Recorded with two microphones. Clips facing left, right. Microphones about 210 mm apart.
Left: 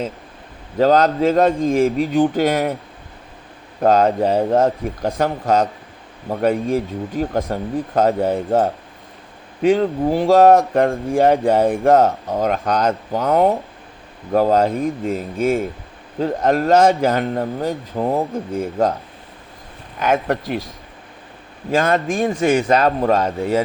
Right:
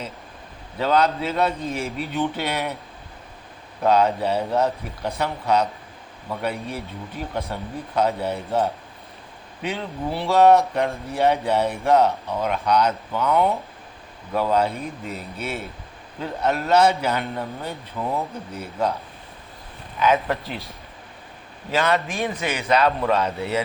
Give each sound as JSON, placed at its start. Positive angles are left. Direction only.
{"t": 0.8, "sound": "speech", "side_deg": 45}
{"t": 3.8, "sound": "speech", "side_deg": 50}
{"t": 20.0, "sound": "speech", "side_deg": 45}
{"t": 21.7, "sound": "speech", "side_deg": 45}